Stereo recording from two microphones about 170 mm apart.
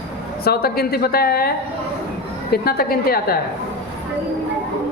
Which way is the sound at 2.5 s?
65° left (ahead or behind).